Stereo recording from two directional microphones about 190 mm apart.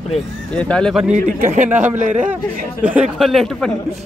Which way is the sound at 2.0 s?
45° right (ahead or behind).